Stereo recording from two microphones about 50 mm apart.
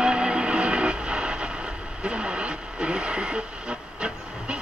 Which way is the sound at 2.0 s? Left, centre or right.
Right.